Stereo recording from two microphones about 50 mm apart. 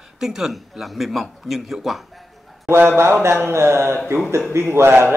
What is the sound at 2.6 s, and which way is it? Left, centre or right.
A man's voice, right.